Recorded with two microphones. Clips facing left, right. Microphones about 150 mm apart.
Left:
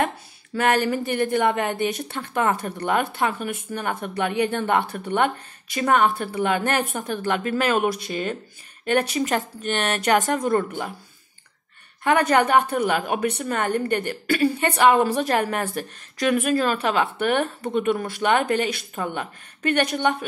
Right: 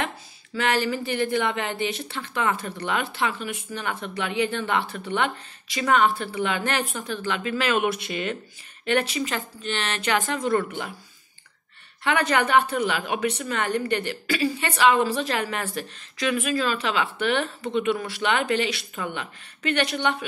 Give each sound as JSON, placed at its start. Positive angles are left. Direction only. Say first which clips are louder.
{"t": 0.6, "sound": "a woman's voice", "louder": "left 3 dB", "side_deg": 50}
{"t": 12.0, "sound": "a woman's voice", "louder": "left 4 dB", "side_deg": 50}